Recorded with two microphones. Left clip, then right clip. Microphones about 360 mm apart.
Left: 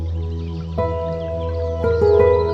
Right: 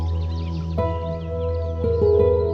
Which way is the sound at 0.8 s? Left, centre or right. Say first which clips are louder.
Left 4 dB; centre.